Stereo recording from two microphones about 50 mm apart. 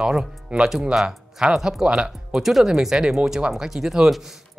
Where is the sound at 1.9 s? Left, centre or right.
Right.